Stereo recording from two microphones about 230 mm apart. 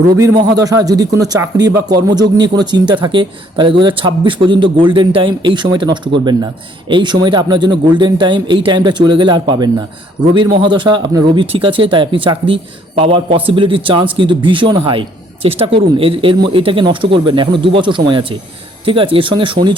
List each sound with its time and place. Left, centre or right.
0.1 s speech: centre